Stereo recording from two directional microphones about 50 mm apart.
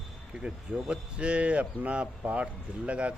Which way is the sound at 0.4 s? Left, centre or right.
Right.